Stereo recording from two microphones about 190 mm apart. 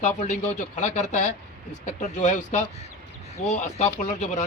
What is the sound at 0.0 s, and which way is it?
Speech, 40° left (ahead or behind).